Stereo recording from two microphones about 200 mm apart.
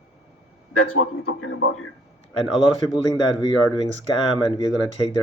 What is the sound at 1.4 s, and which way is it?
Speech, 80° left.